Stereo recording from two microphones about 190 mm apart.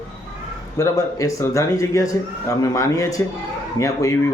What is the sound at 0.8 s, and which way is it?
Speech, 15° left (ahead or behind).